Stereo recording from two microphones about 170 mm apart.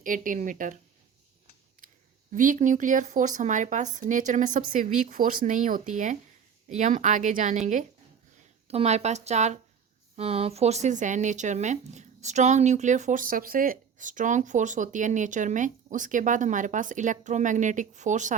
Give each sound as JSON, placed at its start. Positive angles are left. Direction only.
{"t": 0.0, "sound": "speech", "side_deg": -50}
{"t": 2.3, "sound": "speech", "side_deg": -50}